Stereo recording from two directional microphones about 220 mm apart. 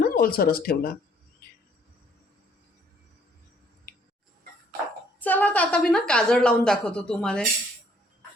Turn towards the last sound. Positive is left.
turn(degrees=5)  # may be behind; listen again after turning